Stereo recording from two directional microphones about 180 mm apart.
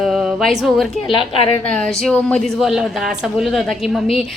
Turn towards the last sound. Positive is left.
turn(degrees=0)  # may be behind; listen again after turning